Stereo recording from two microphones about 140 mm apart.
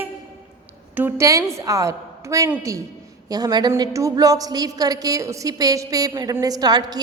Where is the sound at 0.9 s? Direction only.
15° right (ahead or behind).